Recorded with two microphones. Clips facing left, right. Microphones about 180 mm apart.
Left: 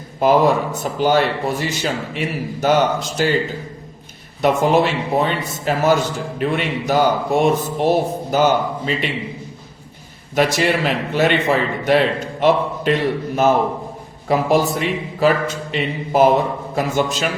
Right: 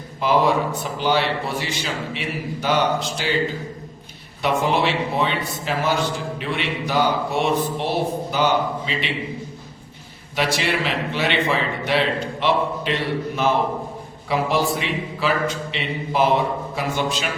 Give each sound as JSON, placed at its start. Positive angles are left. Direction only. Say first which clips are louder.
{"t": 0.2, "sound": "a man's voice", "louder": "left 4 dB", "side_deg": 45}
{"t": 4.4, "sound": "a man's voice", "louder": "left 5 dB", "side_deg": 45}
{"t": 10.3, "sound": "a man's voice", "louder": "left 5 dB", "side_deg": 45}